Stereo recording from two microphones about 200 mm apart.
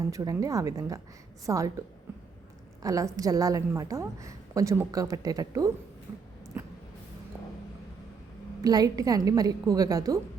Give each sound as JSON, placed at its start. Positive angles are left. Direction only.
{"t": 0.1, "sound": "a woman's voice", "side_deg": -15}
{"t": 2.8, "sound": "a woman's voice", "side_deg": -15}
{"t": 8.6, "sound": "a woman's voice", "side_deg": -20}